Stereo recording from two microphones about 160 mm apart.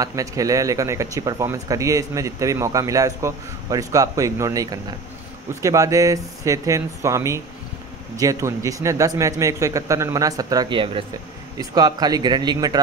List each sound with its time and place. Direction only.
0.0 s speech: 20° right (ahead or behind)